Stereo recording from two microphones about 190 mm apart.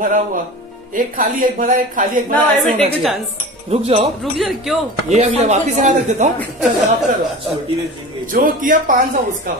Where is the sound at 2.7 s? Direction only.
30° right (ahead or behind).